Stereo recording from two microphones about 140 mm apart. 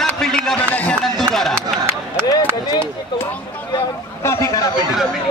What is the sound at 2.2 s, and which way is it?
Chop, 30° left (ahead or behind).